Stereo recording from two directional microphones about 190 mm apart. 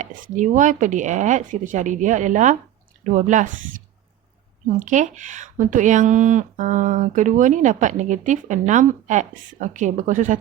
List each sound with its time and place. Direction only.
0.0 s speech: 45° right (ahead or behind)
4.9 s speech: 40° right (ahead or behind)